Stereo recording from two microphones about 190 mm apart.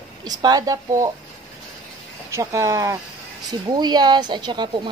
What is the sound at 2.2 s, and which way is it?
Speech, 15° right (ahead or behind).